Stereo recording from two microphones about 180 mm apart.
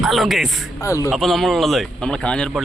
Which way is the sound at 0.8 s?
15° left (ahead or behind).